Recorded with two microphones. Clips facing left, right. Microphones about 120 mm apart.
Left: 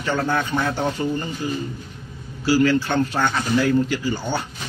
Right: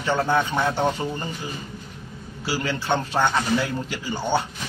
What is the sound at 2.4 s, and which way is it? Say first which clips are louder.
A man's voice: left 9 dB; 25° right (ahead or behind).